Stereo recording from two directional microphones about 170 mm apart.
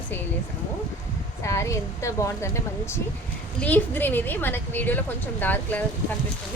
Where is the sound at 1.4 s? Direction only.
15° left (ahead or behind).